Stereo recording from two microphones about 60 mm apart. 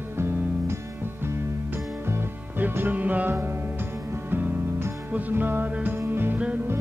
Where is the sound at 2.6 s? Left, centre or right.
Right.